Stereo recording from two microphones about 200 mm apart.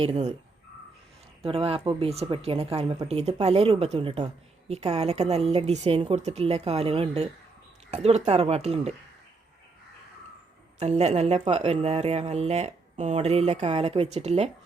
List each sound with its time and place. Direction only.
0.0 s speech: 30° right (ahead or behind)
1.4 s speech: 30° right (ahead or behind)
10.8 s speech: 35° right (ahead or behind)